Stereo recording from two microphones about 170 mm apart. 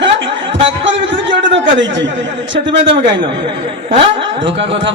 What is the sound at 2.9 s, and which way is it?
Speech, 90° right.